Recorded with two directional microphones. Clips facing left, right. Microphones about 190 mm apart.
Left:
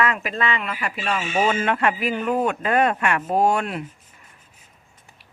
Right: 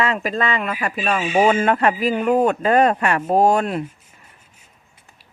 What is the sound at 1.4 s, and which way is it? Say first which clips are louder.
A man's voice: right 4 dB; 40° right (ahead or behind).